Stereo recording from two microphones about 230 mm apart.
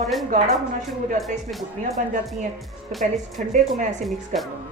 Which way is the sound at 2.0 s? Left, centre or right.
Right.